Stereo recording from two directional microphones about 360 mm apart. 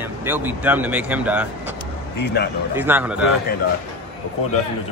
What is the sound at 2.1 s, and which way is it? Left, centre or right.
Speech, left.